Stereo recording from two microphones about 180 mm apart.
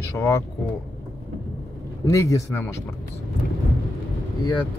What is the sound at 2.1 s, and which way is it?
Speech, 15° left (ahead or behind).